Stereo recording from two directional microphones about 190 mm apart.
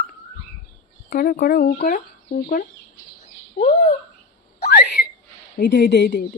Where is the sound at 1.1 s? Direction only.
55° left (ahead or behind).